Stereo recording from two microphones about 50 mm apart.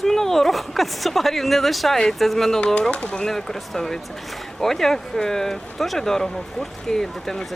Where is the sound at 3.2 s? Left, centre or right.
Centre.